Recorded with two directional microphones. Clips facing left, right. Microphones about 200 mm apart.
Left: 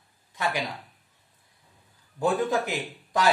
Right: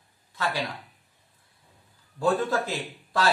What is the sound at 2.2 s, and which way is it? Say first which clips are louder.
Speech: even; 15° left (ahead or behind).